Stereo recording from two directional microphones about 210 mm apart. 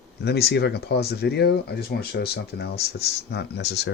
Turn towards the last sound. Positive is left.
turn(degrees=55)  # may be behind; listen again after turning